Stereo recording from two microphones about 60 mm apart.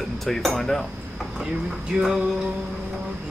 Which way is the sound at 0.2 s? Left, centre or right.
Centre.